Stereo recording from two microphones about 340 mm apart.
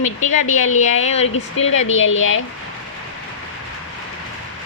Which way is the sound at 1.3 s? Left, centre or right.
Left.